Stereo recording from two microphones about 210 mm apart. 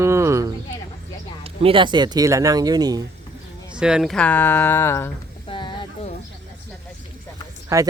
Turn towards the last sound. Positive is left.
turn(degrees=-15)  # may be behind; listen again after turning